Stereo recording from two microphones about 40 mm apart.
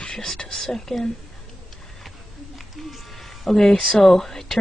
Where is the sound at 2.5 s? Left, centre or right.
Centre.